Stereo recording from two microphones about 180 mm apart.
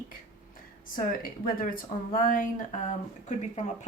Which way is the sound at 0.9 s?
50° left (ahead or behind).